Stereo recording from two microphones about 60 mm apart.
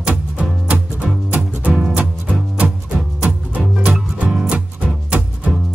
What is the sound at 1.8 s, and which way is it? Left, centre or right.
Music, right.